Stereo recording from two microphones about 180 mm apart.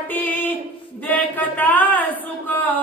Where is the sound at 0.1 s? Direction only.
10° left (ahead or behind).